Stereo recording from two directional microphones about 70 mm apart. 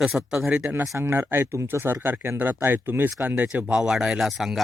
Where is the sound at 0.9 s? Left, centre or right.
Right.